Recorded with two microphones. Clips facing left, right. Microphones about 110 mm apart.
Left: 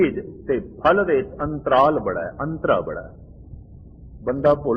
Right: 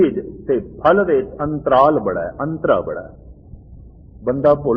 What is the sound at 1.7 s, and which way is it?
Speech, 10° right (ahead or behind).